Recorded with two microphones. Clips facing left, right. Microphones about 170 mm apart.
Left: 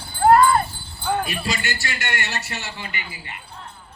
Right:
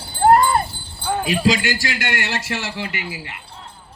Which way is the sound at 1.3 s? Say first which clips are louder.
Right 9 dB; 90° right.